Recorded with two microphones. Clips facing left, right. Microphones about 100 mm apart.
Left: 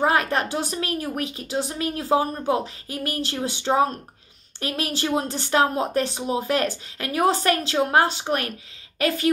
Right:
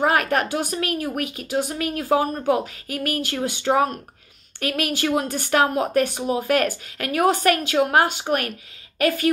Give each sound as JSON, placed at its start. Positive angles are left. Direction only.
{"t": 0.1, "sound": "speech", "side_deg": 25}